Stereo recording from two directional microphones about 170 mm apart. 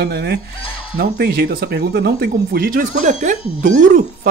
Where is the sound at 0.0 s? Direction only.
65° right (ahead or behind).